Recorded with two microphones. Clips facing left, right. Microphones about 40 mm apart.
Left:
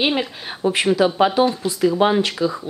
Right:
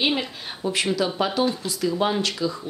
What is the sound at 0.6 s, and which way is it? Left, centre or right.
A woman's voice, left.